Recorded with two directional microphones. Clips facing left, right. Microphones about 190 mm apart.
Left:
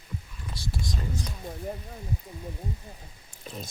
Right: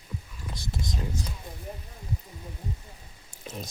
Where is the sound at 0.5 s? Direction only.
20° right (ahead or behind).